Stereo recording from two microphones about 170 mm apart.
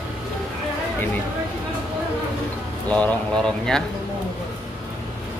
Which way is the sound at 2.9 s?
5° left (ahead or behind).